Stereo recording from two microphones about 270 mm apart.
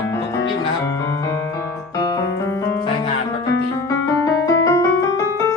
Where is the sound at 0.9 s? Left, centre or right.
Centre.